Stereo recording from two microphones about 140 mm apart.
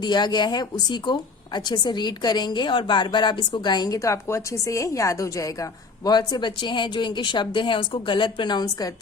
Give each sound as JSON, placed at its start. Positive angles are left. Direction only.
{"t": 0.0, "sound": "a woman's voice", "side_deg": 30}